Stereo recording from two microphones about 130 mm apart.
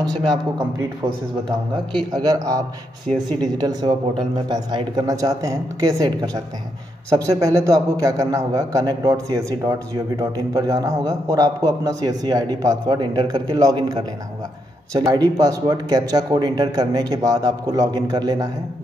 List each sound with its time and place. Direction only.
0.3 s a man's voice: 25° right (ahead or behind)
3.1 s speech: 5° left (ahead or behind)
3.5 s a man's voice: 30° right (ahead or behind)